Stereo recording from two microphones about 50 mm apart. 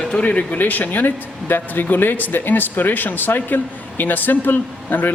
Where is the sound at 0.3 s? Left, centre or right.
Left.